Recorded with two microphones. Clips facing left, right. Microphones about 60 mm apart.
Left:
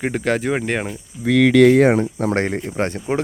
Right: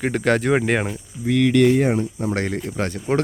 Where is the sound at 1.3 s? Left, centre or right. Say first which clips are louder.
Left 4 dB; left.